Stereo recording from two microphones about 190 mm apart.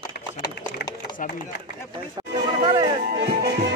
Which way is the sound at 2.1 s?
25° right (ahead or behind).